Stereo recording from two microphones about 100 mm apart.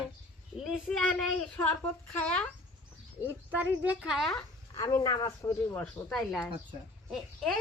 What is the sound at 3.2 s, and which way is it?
Speech, 20° right (ahead or behind).